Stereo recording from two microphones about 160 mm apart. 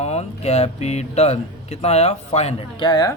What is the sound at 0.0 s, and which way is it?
A man's voice, 40° left (ahead or behind).